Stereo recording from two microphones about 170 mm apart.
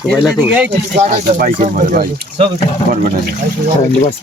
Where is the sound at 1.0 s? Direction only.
45° right (ahead or behind).